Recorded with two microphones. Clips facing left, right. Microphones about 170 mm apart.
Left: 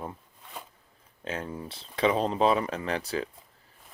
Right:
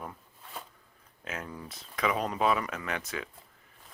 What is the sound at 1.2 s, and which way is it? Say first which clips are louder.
Speech: left 5 dB; 30° left (ahead or behind).